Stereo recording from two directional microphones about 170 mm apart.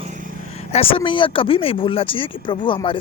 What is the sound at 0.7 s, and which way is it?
Speech, 35° left (ahead or behind).